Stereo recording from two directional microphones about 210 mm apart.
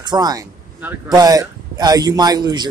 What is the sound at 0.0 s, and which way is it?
Speech, 20° right (ahead or behind).